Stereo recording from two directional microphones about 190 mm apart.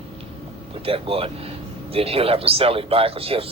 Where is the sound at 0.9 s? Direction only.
30° right (ahead or behind).